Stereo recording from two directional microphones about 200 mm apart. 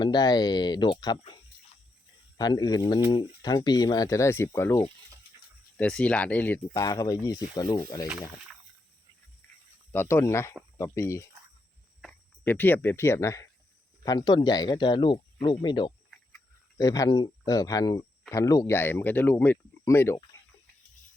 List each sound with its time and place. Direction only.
0.0 s speech: 20° left (ahead or behind)
2.4 s speech: 20° left (ahead or behind)
9.9 s speech: 10° left (ahead or behind)